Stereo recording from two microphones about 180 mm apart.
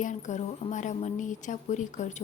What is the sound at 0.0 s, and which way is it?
A woman's voice, 45° left (ahead or behind).